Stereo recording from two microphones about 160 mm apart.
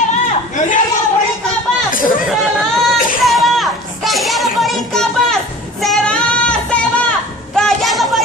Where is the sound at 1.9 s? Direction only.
60° left (ahead or behind).